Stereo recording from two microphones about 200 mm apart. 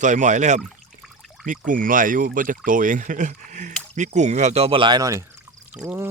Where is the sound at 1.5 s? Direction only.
40° right (ahead or behind).